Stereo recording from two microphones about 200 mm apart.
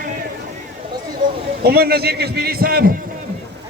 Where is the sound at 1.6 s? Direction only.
50° right (ahead or behind).